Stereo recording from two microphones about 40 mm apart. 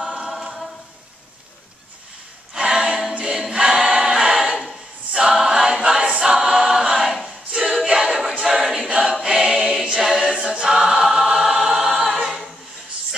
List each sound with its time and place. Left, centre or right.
0.2 s a capella: centre
2.5 s a capella: centre
4.0 s choir: centre
5.1 s a capella: centre
6.1 s choir: centre
8.3 s a capella: centre
8.5 s a capella: centre
9.2 s choir: right